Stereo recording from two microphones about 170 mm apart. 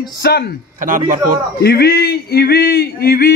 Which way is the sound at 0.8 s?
50° right (ahead or behind).